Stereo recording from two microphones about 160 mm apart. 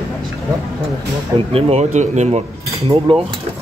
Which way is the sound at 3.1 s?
35° right (ahead or behind).